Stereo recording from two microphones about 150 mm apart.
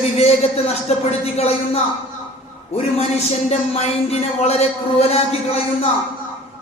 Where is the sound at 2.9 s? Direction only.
45° left (ahead or behind).